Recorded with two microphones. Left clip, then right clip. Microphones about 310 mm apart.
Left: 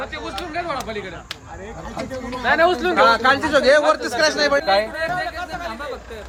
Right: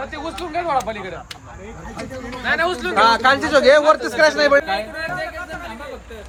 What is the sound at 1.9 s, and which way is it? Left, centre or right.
Speech, centre.